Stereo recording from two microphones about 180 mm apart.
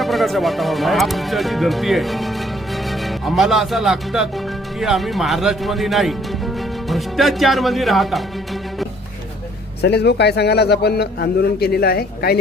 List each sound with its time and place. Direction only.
0.0 s speech: centre (ahead or behind)
9.8 s a man's voice: 65° left (ahead or behind)